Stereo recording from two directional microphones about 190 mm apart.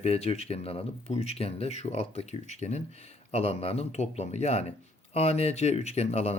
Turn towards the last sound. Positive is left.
turn(degrees=35)  # may be behind; listen again after turning